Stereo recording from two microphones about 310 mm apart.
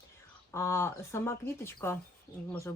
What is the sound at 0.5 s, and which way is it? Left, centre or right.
Speech, centre.